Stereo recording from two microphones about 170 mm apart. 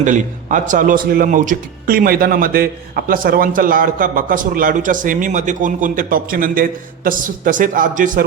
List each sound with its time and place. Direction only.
0.0 s speech: 50° right (ahead or behind)